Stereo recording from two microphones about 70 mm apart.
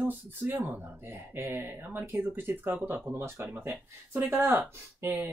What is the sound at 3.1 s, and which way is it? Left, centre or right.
Speech, right.